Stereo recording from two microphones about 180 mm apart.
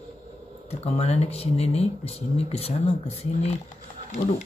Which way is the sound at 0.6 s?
35° left (ahead or behind).